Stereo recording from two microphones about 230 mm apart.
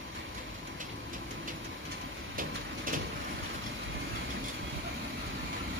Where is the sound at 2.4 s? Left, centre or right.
Right.